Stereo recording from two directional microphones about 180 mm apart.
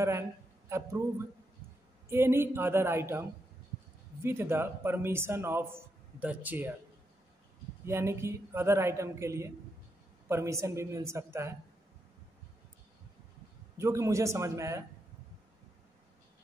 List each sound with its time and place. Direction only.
0.7 s a man's voice: 15° right (ahead or behind)
7.8 s a man's voice: 15° right (ahead or behind)
13.7 s a man's voice: 15° right (ahead or behind)